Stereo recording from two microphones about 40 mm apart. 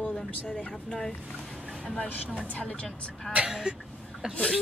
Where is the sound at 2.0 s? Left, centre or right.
Left.